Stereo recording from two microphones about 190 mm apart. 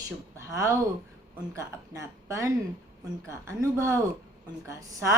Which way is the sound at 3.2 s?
15° right (ahead or behind).